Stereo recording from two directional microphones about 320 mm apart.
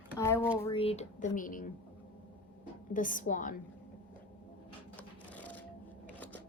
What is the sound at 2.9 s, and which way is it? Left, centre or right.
Speech, left.